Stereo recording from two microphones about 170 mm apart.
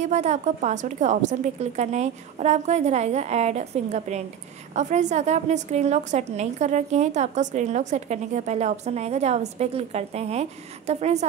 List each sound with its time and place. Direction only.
0.0 s a woman's voice: 40° right (ahead or behind)